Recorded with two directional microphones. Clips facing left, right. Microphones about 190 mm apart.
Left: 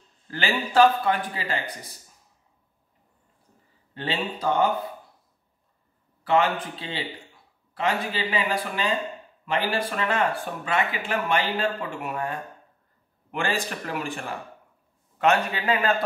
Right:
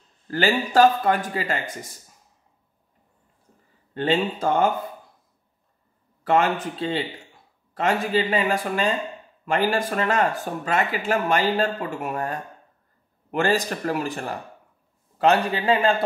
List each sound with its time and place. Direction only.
0.3 s speech: 40° right (ahead or behind)
3.9 s speech: 45° right (ahead or behind)
6.2 s speech: 45° right (ahead or behind)